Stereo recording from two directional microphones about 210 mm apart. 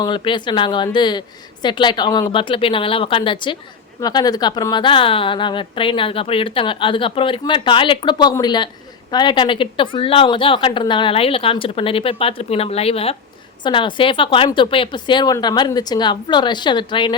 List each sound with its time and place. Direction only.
0.0 s a woman's voice: 20° left (ahead or behind)